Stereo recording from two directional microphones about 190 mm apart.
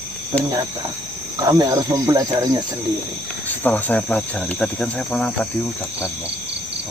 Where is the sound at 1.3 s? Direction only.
20° right (ahead or behind).